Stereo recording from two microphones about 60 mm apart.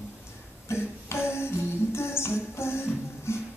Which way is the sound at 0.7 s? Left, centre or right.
Left.